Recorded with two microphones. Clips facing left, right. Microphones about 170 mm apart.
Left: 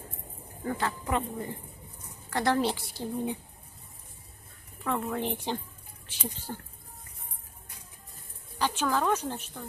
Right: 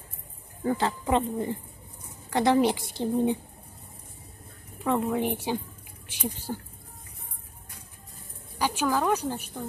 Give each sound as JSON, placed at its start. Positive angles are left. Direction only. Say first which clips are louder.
{"t": 0.7, "sound": "a woman's voice", "louder": "right 4 dB", "side_deg": -25}
{"t": 4.8, "sound": "speech", "louder": "right 5 dB", "side_deg": -15}
{"t": 8.5, "sound": "a woman's voice", "louder": "right 2 dB", "side_deg": -10}